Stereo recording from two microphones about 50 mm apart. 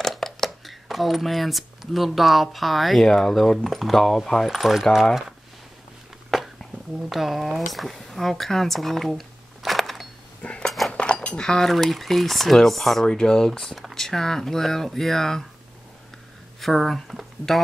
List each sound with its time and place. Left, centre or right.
0.0 s speech: centre
6.3 s a sound: centre
7.0 s speech: centre
10.4 s a sound: left
10.9 s cutlery: left
11.2 s speech: centre
11.7 s speech: centre
16.6 s speech: centre